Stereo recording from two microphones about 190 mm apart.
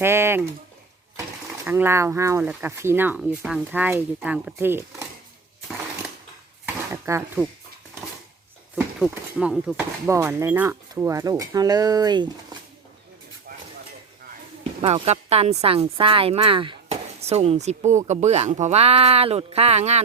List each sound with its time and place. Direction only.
0.0 s speech: 15° right (ahead or behind)
1.6 s speech: 15° right (ahead or behind)
6.9 s a sound: 15° right (ahead or behind)
8.7 s speech: centre (ahead or behind); by 12.3 s 20° right (ahead or behind)
14.8 s speech: 30° right (ahead or behind)